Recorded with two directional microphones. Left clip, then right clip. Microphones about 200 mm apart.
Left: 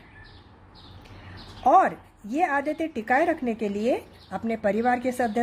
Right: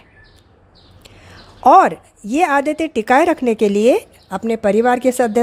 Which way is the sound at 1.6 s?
40° right (ahead or behind).